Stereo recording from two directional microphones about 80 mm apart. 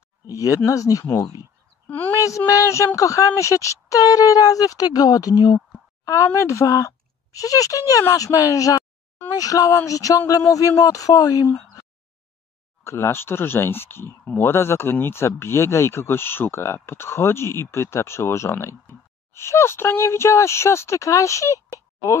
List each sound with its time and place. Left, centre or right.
0.3 s speech: left
1.9 s speech: left
2.1 s speech: left
6.0 s speech: left
12.8 s speech: left